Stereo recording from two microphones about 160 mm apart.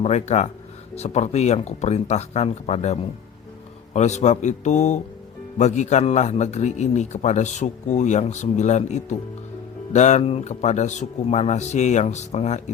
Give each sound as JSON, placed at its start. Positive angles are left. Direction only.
{"t": 0.0, "sound": "a man's voice", "side_deg": 45}